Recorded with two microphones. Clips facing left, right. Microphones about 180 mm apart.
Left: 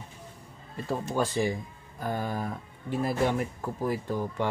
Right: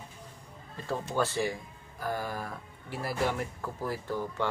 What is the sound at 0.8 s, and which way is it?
Speech, 15° left (ahead or behind).